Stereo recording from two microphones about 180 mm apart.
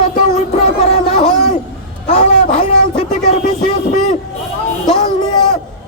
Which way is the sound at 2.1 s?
40° left (ahead or behind).